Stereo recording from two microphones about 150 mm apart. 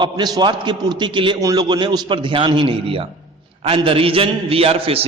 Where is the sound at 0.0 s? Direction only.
30° right (ahead or behind).